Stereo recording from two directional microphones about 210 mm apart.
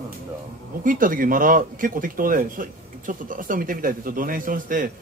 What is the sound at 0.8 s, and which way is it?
Speech, 40° right (ahead or behind).